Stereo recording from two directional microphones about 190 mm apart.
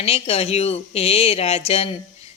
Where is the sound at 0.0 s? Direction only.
30° left (ahead or behind).